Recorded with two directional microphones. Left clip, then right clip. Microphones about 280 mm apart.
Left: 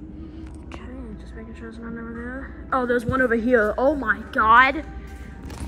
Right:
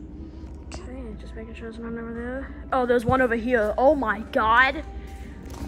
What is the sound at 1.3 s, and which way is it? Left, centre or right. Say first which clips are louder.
A woman's voice: right 3 dB; centre.